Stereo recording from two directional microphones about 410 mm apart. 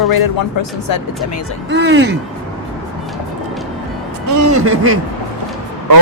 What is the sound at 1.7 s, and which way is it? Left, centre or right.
Speech, right.